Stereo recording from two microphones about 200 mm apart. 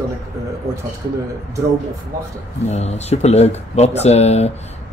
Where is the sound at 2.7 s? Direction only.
35° left (ahead or behind).